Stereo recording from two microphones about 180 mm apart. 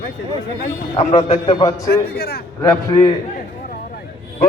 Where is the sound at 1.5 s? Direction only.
20° left (ahead or behind).